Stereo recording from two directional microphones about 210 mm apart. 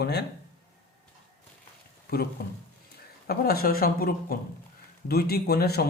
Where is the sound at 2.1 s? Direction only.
50° left (ahead or behind).